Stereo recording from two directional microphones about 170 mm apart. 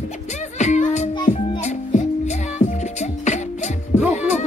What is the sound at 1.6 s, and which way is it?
Music, 40° left (ahead or behind).